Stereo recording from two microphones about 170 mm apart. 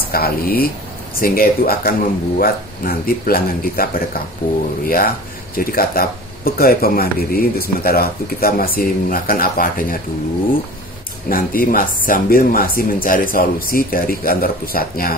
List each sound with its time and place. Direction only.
0.1 s speech: 60° left (ahead or behind)
11.2 s speech: 60° left (ahead or behind)